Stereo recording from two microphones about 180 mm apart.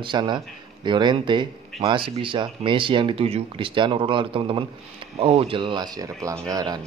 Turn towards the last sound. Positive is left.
turn(degrees=-20)  # may be behind; listen again after turning